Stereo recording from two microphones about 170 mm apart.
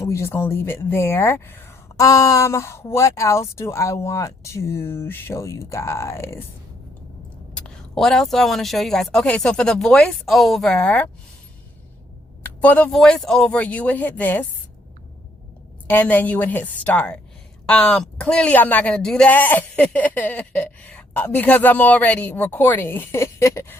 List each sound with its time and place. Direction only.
0.0 s speech: 15° left (ahead or behind)
7.5 s speech: 5° left (ahead or behind)
12.4 s speech: 10° left (ahead or behind)
15.9 s speech: 10° left (ahead or behind)